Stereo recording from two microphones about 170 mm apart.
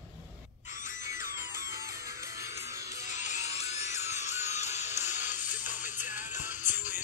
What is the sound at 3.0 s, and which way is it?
Music, 45° left (ahead or behind).